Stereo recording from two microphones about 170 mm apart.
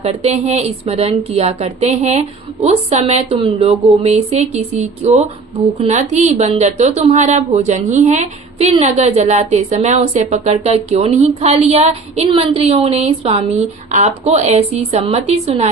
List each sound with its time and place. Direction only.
0.0 s a woman's voice: 35° right (ahead or behind)